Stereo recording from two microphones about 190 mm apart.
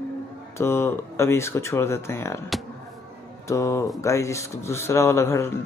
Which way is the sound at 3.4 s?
15° left (ahead or behind).